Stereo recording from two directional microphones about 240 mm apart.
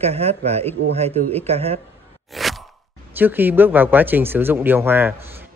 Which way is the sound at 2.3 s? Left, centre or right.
Centre.